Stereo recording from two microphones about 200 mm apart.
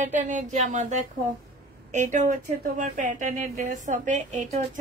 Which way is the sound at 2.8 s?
40° right (ahead or behind).